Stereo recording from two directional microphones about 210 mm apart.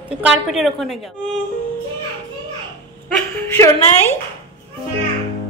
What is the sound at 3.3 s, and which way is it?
Speech, 10° left (ahead or behind).